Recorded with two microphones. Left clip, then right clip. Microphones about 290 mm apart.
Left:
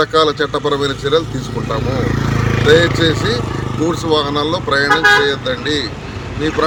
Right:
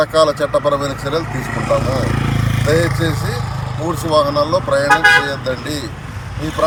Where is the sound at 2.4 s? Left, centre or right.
Centre.